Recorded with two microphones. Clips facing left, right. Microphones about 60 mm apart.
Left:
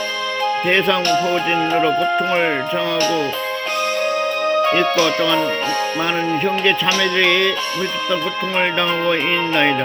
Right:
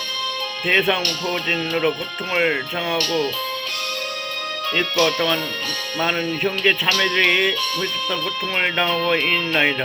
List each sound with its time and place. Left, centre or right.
1.0 s speech: left
4.5 s speech: left
6.8 s music: centre
7.3 s music: centre